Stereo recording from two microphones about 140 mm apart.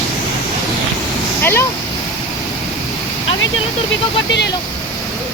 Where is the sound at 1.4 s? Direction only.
15° left (ahead or behind).